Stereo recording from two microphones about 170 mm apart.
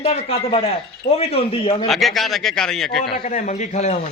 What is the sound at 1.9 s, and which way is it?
A man's voice, centre (ahead or behind).